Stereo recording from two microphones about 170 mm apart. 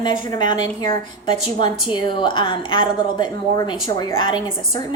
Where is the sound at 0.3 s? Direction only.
25° left (ahead or behind).